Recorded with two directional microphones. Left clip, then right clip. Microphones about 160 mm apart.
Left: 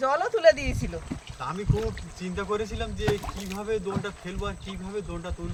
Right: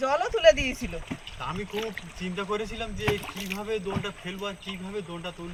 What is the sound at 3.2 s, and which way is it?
Speech, 30° left (ahead or behind).